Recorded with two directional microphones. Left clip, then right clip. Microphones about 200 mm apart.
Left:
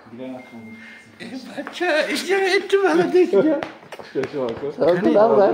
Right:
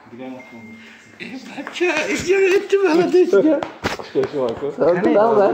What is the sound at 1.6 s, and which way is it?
Speech, 25° left (ahead or behind).